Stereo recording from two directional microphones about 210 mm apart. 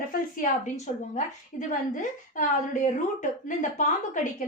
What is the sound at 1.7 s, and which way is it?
A woman's voice, 35° left (ahead or behind).